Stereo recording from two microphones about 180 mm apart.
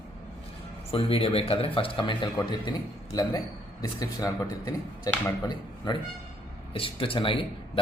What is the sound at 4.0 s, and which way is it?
A man's voice, 20° left (ahead or behind).